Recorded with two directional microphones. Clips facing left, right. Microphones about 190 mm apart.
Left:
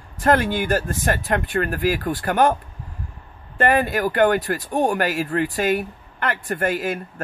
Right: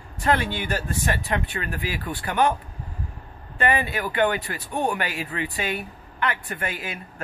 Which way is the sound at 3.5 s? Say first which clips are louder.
Left 5 dB; 45° left (ahead or behind).